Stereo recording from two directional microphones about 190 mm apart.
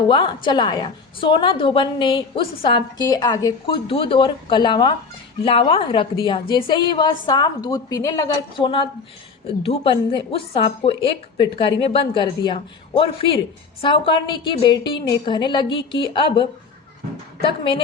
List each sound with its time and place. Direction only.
0.1 s a woman's voice: 25° left (ahead or behind)
17.6 s a woman's voice: 25° left (ahead or behind)